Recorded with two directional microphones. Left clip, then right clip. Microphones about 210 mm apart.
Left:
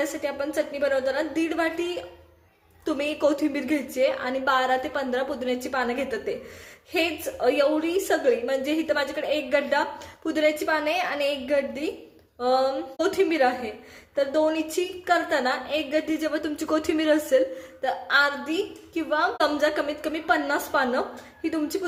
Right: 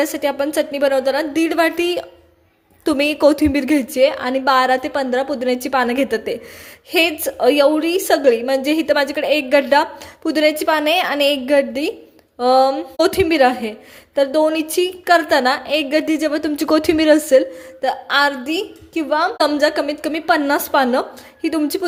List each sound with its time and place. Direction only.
0.0 s a woman's voice: 45° right (ahead or behind)